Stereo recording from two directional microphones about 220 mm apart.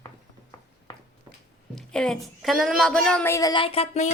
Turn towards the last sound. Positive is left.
turn(degrees=30)  # may be behind; listen again after turning